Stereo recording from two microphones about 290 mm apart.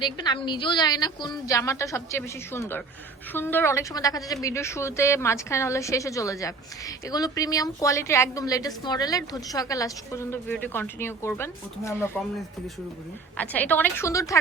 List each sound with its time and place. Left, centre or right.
0.0 s a woman's voice: centre
13.3 s a woman's voice: centre